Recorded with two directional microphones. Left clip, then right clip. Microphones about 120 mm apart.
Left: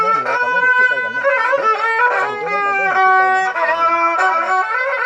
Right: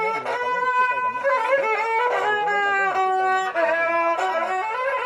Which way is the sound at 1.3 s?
30° right (ahead or behind).